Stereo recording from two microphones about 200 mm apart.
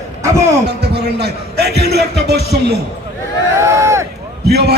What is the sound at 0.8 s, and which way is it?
Music, 55° right (ahead or behind).